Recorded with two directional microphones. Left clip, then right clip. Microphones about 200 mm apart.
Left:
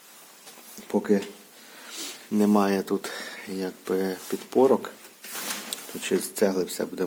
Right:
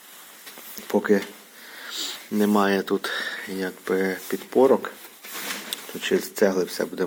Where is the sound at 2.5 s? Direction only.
10° left (ahead or behind).